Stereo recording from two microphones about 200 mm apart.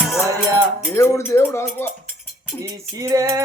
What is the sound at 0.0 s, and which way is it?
Cowbell, centre (ahead or behind).